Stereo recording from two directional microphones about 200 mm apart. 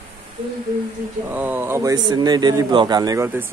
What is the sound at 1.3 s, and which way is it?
A man's voice, 10° right (ahead or behind).